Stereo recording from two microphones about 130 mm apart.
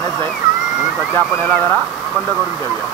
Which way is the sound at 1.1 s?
15° left (ahead or behind).